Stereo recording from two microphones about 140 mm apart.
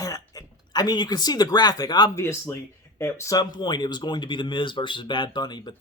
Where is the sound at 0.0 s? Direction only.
25° left (ahead or behind).